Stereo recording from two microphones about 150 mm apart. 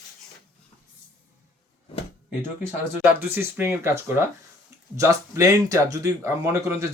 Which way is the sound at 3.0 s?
15° right (ahead or behind).